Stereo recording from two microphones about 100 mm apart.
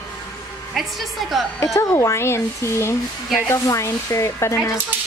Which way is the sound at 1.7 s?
30° left (ahead or behind).